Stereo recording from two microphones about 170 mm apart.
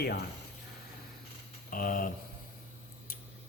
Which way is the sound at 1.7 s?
55° left (ahead or behind).